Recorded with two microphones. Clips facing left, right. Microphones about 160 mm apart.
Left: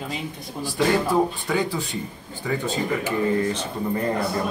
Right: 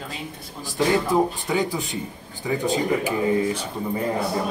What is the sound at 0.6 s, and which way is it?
Speech, 20° right (ahead or behind).